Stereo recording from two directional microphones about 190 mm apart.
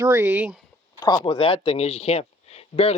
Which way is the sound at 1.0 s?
25° left (ahead or behind).